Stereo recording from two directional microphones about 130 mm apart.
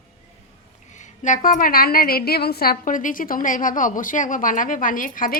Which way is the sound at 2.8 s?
90° left.